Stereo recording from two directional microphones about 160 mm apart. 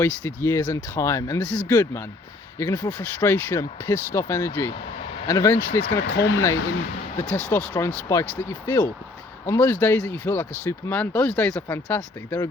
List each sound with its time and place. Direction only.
0.0 s speech: 15° left (ahead or behind)
6.0 s speech: 90° left
7.3 s speech: 10° left (ahead or behind)